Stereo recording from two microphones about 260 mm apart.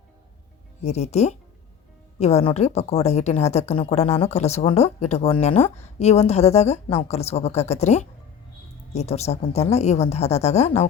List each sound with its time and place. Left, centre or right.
0.9 s a woman's voice: left